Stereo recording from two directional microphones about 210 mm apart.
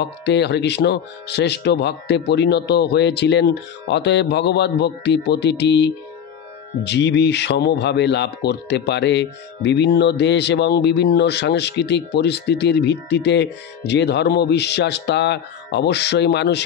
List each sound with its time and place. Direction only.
0.2 s speech: 55° left (ahead or behind)